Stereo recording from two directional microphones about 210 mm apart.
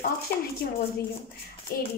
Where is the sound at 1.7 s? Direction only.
45° left (ahead or behind).